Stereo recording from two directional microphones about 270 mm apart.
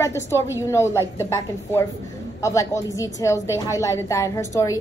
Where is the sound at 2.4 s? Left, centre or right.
Centre.